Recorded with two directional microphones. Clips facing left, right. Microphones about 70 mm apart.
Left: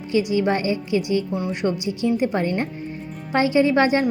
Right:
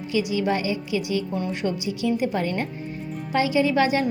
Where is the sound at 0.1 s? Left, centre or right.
Left.